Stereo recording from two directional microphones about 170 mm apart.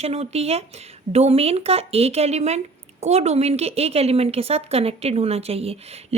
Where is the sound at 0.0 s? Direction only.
40° right (ahead or behind).